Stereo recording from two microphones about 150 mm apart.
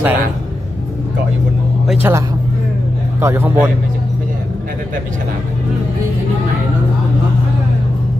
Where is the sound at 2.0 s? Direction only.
15° right (ahead or behind).